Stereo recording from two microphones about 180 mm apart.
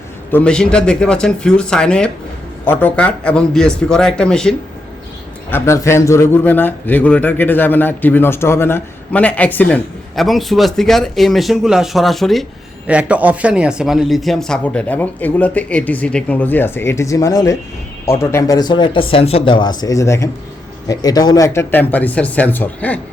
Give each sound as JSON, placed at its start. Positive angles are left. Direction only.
{"t": 0.3, "sound": "a man's voice", "side_deg": 10}